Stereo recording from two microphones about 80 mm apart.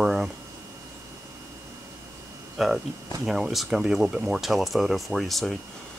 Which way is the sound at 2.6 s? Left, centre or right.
Centre.